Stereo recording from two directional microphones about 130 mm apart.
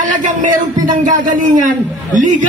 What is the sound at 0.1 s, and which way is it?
Speech, 80° right.